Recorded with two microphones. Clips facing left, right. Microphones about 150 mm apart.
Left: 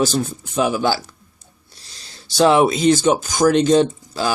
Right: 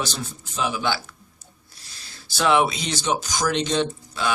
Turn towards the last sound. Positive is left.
turn(degrees=35)  # may be behind; listen again after turning